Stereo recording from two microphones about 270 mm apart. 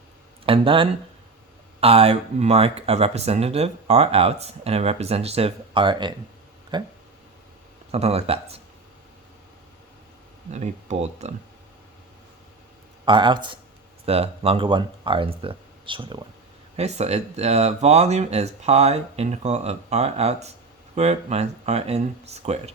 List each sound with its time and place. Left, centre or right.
0.4 s speech: centre
7.9 s speech: right
10.5 s speech: right
13.1 s speech: centre